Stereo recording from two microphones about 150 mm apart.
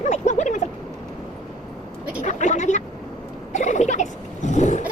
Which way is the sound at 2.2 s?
50° left (ahead or behind).